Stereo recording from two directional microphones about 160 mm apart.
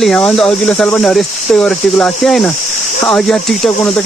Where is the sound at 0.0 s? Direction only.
5° left (ahead or behind).